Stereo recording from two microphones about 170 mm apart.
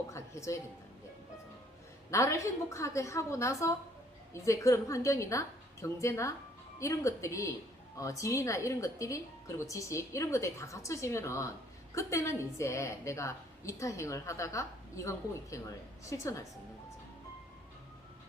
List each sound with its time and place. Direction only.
0.1 s a woman's voice: 15° left (ahead or behind)
2.0 s a woman's voice: 15° left (ahead or behind)